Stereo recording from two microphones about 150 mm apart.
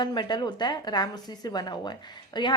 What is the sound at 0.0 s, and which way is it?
A woman's voice, 30° left (ahead or behind).